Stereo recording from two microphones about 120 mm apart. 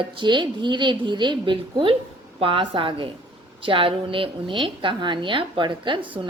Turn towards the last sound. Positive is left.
turn(degrees=-45)  # may be behind; listen again after turning